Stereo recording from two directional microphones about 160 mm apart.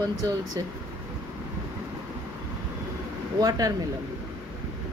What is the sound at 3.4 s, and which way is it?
Speech, 20° right (ahead or behind).